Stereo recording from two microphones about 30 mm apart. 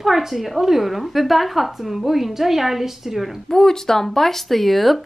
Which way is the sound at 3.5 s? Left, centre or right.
Centre.